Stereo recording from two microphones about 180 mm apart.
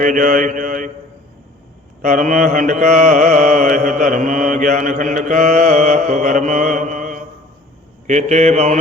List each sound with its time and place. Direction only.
0.0 s mantra: 45° right (ahead or behind)
2.0 s mantra: 50° right (ahead or behind)